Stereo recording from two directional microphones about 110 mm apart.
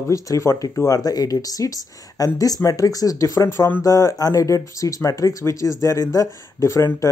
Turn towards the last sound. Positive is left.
turn(degrees=30)  # may be behind; listen again after turning